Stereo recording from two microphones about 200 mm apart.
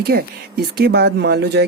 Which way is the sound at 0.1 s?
50° right (ahead or behind).